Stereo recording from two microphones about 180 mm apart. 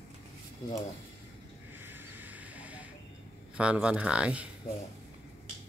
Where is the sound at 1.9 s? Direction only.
10° right (ahead or behind).